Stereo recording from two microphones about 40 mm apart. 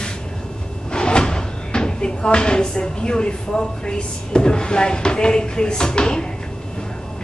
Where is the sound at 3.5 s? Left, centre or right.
Centre.